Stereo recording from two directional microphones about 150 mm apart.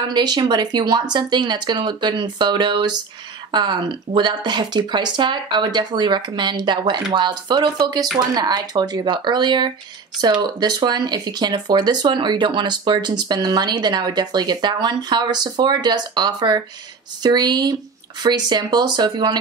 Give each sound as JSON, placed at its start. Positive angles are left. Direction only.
{"t": 0.1, "sound": "speech", "side_deg": -30}